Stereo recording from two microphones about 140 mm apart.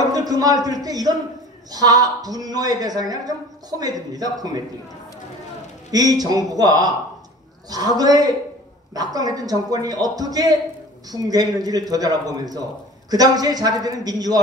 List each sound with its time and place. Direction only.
0.1 s a man's voice: 25° right (ahead or behind)
5.9 s a man's voice: 30° right (ahead or behind)